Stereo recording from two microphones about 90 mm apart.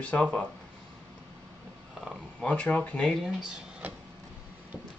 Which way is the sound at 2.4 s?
15° left (ahead or behind).